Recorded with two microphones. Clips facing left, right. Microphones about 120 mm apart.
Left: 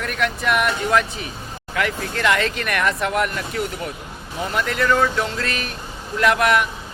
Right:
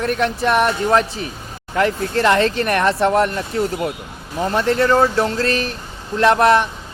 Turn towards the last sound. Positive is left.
turn(degrees=-30)  # may be behind; listen again after turning